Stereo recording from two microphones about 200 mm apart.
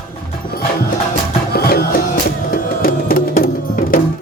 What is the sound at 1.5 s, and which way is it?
Music, 50° left (ahead or behind).